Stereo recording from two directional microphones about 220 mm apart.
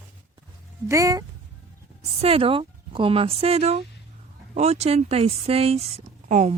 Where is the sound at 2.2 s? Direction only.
25° right (ahead or behind).